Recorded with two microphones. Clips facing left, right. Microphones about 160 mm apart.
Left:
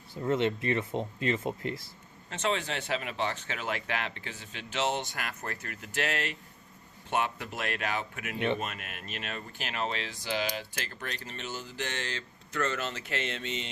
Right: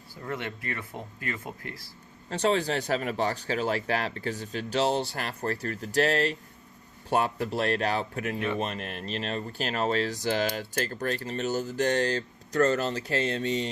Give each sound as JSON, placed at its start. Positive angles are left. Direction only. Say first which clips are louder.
{"t": 0.1, "sound": "speech", "louder": "left 7 dB", "side_deg": 25}
{"t": 2.3, "sound": "speech", "louder": "right 6 dB", "side_deg": -35}